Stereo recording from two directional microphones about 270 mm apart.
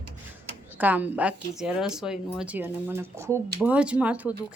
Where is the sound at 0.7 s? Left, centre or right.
Centre.